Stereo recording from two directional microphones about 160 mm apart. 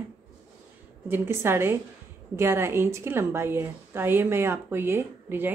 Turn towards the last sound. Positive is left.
turn(degrees=-15)  # may be behind; listen again after turning